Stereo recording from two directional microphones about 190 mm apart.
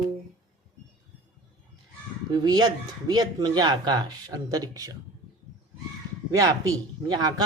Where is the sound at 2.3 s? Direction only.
20° right (ahead or behind).